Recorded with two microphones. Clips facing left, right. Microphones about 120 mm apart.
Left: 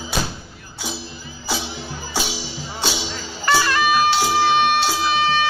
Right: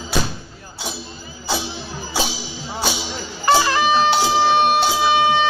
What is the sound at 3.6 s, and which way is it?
Music, 25° right (ahead or behind).